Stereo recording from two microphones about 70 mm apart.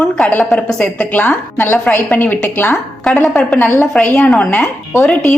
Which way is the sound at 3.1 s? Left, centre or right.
Centre.